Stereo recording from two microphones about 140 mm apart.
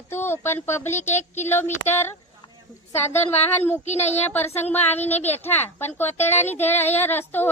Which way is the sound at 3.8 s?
50° left (ahead or behind).